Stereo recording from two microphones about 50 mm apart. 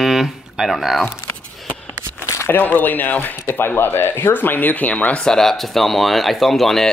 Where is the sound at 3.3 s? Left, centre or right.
Left.